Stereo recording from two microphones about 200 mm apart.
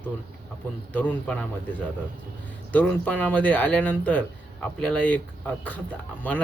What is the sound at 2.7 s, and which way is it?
Speech, 5° left (ahead or behind).